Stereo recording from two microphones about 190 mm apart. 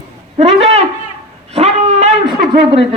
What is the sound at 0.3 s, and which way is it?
Speech, 35° right (ahead or behind).